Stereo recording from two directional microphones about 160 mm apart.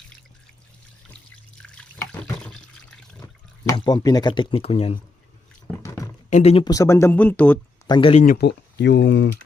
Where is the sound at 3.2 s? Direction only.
25° left (ahead or behind).